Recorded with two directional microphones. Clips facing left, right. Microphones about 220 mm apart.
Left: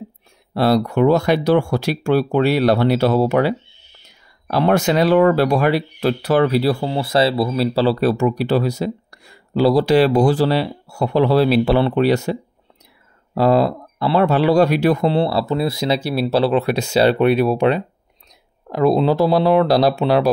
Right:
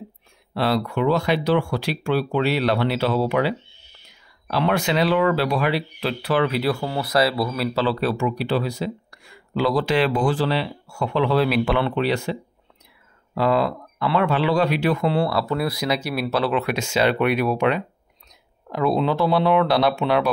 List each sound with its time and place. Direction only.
0.6 s speech: 45° left (ahead or behind)
6.8 s speech: 25° left (ahead or behind); by 15.1 s 40° left (ahead or behind)
15.1 s speech: 25° left (ahead or behind)